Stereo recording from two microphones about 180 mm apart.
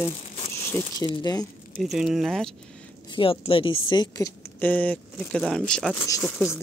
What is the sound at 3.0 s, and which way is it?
Speech, 30° left (ahead or behind).